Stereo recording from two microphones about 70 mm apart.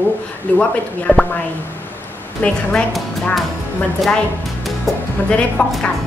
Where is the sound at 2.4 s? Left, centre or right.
Centre.